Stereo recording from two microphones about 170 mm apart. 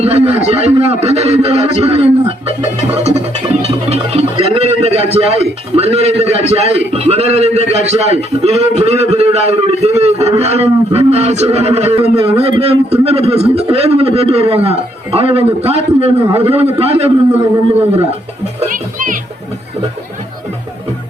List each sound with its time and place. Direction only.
0.0 s a man's voice: 35° right (ahead or behind)
18.7 s music: 50° right (ahead or behind)